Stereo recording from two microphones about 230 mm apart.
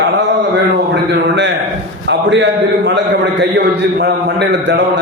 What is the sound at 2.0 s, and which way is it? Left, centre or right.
Speech, right.